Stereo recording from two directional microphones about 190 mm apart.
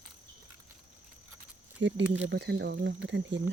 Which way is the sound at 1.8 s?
75° right (ahead or behind).